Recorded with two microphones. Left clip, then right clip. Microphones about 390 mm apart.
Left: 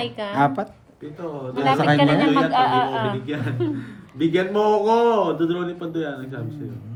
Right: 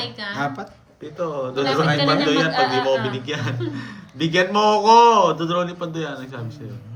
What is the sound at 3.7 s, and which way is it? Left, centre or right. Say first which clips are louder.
Speech: even; centre.